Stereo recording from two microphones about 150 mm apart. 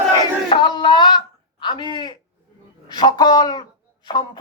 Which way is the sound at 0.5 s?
30° left (ahead or behind).